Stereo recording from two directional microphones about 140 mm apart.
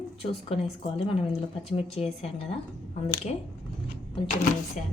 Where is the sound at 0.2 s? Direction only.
45° left (ahead or behind).